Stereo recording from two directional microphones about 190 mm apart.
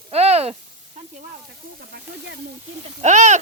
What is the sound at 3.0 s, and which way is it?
Speech, 40° right (ahead or behind).